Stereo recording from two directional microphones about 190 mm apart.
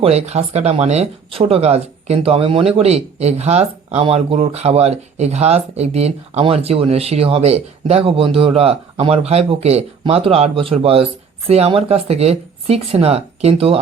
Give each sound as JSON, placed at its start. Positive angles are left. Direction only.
{"t": 0.0, "sound": "speech", "side_deg": -35}